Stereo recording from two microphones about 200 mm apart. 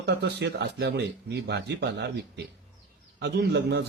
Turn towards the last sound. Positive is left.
turn(degrees=-55)  # may be behind; listen again after turning